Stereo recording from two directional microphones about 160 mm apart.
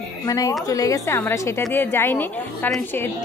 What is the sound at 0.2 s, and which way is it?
A woman's voice, 20° left (ahead or behind).